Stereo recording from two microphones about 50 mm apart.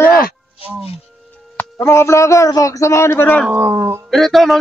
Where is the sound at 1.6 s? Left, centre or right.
Left.